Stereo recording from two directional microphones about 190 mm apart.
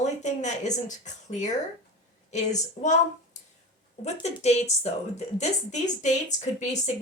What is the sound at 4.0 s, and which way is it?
A woman's voice, 35° left (ahead or behind).